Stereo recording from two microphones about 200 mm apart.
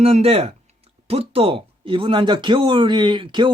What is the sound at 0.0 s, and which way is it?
Speech, 30° right (ahead or behind).